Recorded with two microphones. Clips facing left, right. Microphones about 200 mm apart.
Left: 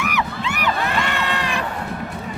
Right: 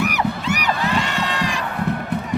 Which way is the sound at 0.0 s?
40° right (ahead or behind).